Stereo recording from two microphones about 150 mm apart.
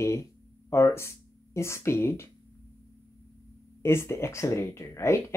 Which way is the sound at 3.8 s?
15° left (ahead or behind).